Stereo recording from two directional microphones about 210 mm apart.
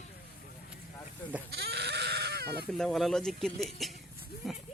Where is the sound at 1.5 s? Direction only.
50° right (ahead or behind).